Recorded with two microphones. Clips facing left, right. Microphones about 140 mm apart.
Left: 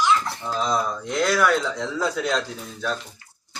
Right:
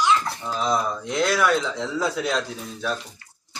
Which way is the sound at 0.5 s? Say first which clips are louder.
Even; 5° right (ahead or behind).